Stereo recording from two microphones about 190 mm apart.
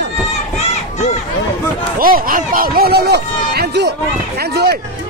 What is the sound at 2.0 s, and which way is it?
Speech, 50° right (ahead or behind).